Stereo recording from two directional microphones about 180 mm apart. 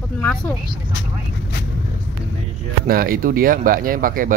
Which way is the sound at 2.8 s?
55° right (ahead or behind).